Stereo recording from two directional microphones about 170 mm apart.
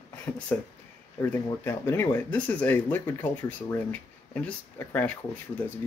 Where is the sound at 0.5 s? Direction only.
10° left (ahead or behind).